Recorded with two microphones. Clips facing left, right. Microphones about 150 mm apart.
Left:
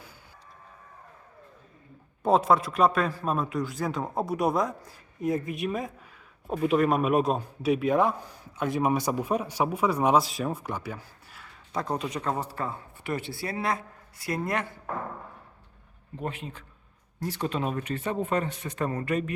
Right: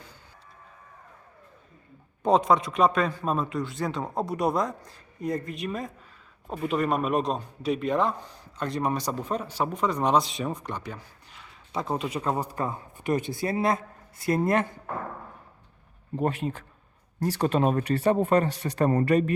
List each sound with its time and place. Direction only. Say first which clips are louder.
2.2 s a man's voice: right 1 dB; 5° left (ahead or behind); by 14.7 s 25° right (ahead or behind)
16.1 s speech: right 8 dB; 40° right (ahead or behind)